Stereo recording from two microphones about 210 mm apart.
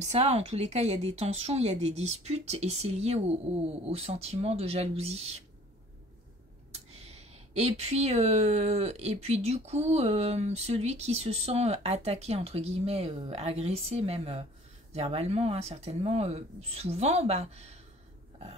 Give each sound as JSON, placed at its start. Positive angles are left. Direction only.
{"t": 0.0, "sound": "speech", "side_deg": -30}
{"t": 6.7, "sound": "speech", "side_deg": -30}